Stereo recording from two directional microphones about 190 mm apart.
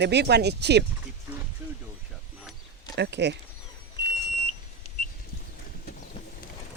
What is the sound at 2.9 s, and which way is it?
Speech, 65° right (ahead or behind).